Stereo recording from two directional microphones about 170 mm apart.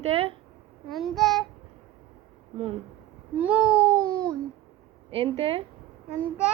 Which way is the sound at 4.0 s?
5° left (ahead or behind).